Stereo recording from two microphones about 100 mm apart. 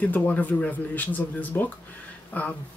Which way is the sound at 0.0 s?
15° left (ahead or behind).